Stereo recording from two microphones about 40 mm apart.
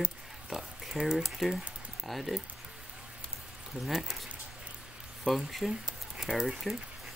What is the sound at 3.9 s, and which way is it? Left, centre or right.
Speech, centre.